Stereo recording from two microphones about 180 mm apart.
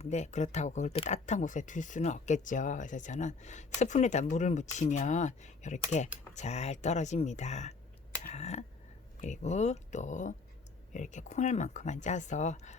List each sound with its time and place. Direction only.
0.0 s speech: 40° left (ahead or behind)